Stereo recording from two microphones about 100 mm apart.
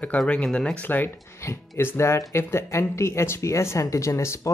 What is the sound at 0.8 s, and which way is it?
Speech, 20° left (ahead or behind).